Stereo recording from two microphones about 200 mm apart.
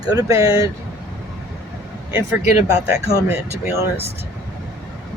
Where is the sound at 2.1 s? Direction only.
10° right (ahead or behind).